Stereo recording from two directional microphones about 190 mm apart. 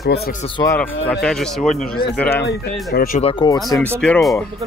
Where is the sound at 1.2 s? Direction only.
5° left (ahead or behind).